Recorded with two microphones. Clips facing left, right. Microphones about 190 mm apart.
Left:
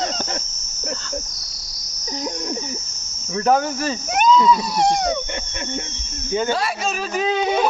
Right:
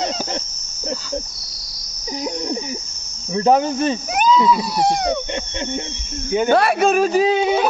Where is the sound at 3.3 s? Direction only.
20° right (ahead or behind).